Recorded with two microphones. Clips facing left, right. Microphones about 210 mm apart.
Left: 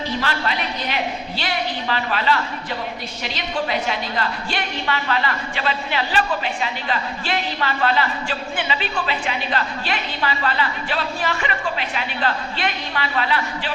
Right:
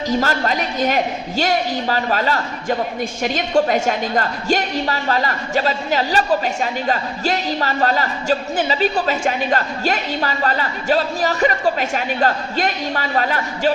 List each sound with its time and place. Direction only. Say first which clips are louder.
0.1 s a woman's voice: right 7 dB; 45° right (ahead or behind)